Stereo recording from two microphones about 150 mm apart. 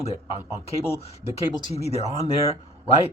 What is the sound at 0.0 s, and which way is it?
Speech, 45° left (ahead or behind).